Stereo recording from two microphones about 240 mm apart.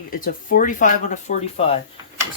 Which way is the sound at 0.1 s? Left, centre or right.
Left.